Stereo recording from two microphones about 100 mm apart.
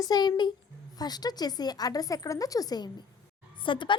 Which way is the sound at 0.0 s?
45° left (ahead or behind).